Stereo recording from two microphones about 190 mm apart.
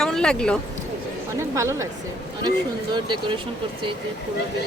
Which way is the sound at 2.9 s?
25° right (ahead or behind).